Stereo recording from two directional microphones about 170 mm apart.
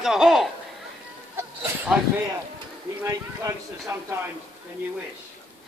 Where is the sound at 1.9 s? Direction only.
5° right (ahead or behind).